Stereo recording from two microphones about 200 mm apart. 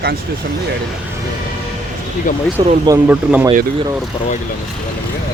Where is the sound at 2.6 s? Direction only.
25° right (ahead or behind).